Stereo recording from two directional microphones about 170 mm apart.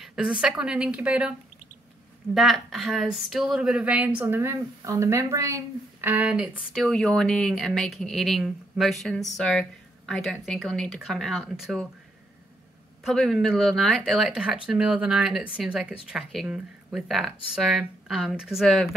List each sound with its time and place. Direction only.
0.0 s speech: 5° right (ahead or behind)
2.3 s speech: centre (ahead or behind)
13.0 s speech: centre (ahead or behind)